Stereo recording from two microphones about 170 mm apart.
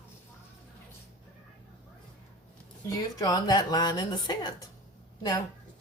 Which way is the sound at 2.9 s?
20° left (ahead or behind).